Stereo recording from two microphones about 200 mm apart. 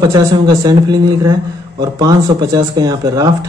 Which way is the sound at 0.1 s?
20° right (ahead or behind).